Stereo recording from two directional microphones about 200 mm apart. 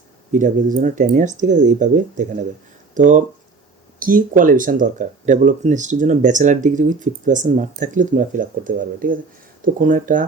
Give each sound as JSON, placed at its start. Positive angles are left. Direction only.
{"t": 0.3, "sound": "speech", "side_deg": -40}